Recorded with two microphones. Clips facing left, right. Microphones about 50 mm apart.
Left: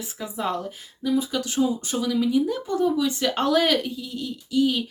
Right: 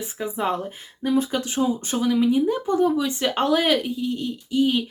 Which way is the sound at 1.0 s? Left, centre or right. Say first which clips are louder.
Right 2 dB; right.